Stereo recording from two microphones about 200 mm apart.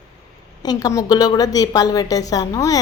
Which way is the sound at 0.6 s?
20° left (ahead or behind).